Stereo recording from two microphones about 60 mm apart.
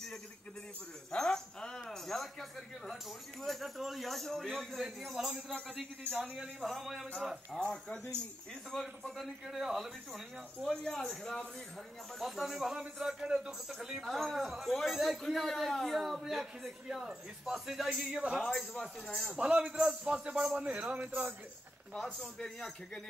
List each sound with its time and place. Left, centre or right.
1.1 s dog: centre
3.4 s a man's voice: centre
7.6 s speech: centre
9.0 s a man's voice: centre
10.7 s a man's voice: centre
18.4 s speech: centre
19.3 s a man's voice: centre